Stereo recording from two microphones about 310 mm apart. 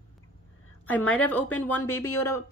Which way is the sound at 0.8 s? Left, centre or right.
Centre.